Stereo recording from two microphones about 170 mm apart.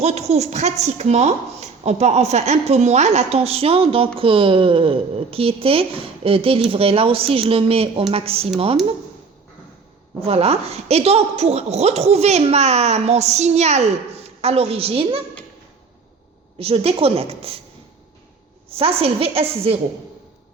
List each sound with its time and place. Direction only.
0.0 s a woman's voice: 40° right (ahead or behind)
10.2 s a woman's voice: 35° right (ahead or behind)
16.6 s a woman's voice: 35° right (ahead or behind)
18.7 s a woman's voice: 35° right (ahead or behind)